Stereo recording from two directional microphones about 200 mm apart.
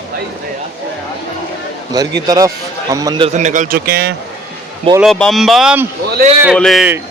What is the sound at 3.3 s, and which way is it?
Speech, 40° right (ahead or behind).